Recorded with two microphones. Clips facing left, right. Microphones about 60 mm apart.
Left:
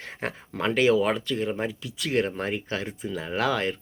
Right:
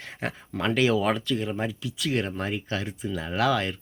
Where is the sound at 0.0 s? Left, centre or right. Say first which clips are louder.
Even; left.